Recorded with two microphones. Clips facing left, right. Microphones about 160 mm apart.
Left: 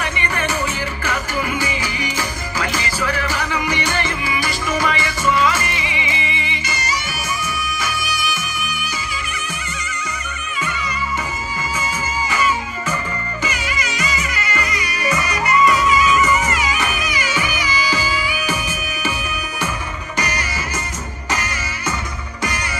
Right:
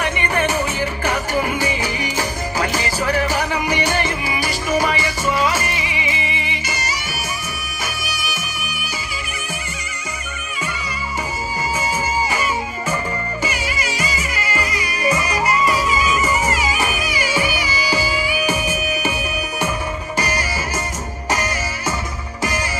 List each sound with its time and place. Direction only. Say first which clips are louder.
1.0 s music: right 3 dB; 40° right (ahead or behind)
6.3 s music: even; 10° right (ahead or behind)
13.9 s music: even; 35° right (ahead or behind)
18.3 s music: right 3 dB; 10° right (ahead or behind)
20.1 s music: right 1 dB; 30° right (ahead or behind)